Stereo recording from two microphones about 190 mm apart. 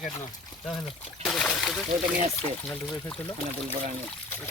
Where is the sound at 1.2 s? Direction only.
Centre (ahead or behind).